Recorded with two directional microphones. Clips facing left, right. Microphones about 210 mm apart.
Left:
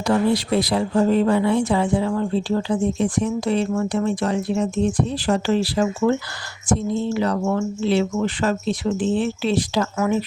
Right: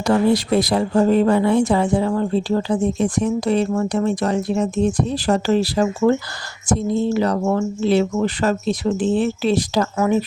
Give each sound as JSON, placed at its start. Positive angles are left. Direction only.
{"t": 0.0, "sound": "speech", "side_deg": -45}